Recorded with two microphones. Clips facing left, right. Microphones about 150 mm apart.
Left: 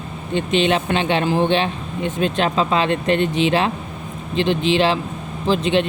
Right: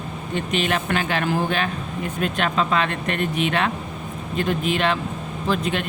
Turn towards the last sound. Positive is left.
turn(degrees=30)  # may be behind; listen again after turning